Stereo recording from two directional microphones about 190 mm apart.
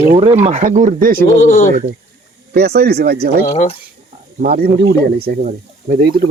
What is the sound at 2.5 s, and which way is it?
Speech, 60° right (ahead or behind).